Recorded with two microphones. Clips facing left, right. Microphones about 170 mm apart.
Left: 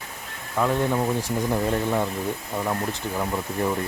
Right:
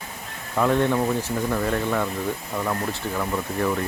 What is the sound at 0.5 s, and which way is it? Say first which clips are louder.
Speech: right 2 dB; 5° left (ahead or behind).